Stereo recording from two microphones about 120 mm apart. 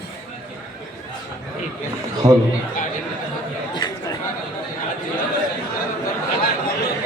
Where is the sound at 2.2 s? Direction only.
75° right (ahead or behind).